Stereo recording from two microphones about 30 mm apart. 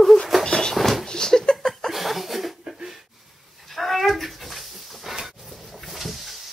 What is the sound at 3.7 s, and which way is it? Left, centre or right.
Dog, centre.